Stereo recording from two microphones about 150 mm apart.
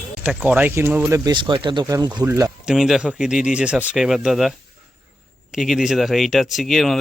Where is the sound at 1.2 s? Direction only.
30° right (ahead or behind).